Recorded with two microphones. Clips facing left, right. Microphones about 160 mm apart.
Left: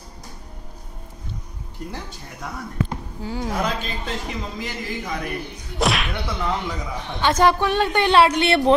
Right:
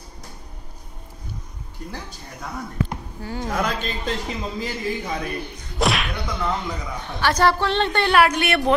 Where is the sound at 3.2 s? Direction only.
10° left (ahead or behind).